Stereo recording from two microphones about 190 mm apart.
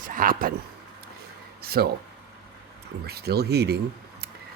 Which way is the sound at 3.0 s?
55° right (ahead or behind).